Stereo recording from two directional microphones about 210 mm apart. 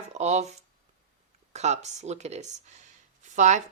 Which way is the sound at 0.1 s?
35° right (ahead or behind).